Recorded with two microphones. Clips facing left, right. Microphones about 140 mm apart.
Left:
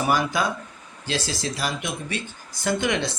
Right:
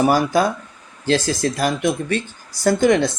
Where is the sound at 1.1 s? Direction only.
45° right (ahead or behind).